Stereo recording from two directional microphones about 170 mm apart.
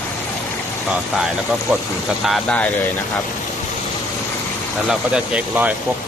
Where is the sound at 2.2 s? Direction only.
5° left (ahead or behind).